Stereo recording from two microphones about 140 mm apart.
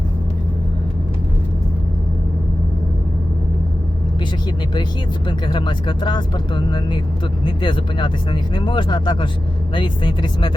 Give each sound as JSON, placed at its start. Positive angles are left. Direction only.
{"t": 5.5, "sound": "speech", "side_deg": 35}